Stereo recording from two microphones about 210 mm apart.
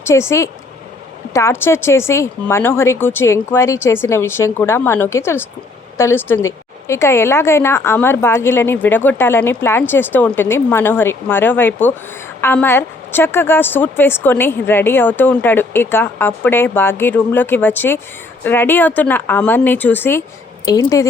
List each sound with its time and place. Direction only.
0.0 s a woman's voice: 10° left (ahead or behind)